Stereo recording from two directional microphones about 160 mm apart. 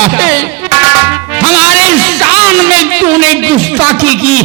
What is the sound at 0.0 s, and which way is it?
Music, 10° right (ahead or behind).